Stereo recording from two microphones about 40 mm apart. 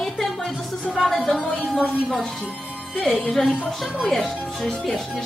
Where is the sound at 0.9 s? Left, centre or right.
Centre.